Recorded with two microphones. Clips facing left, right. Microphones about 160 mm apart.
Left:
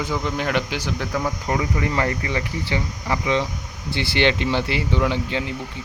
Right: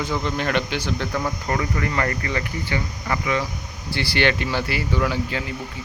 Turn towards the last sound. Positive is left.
turn(degrees=20)  # may be behind; listen again after turning